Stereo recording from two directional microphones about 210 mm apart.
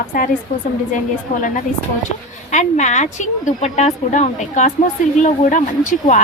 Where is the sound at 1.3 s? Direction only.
35° left (ahead or behind).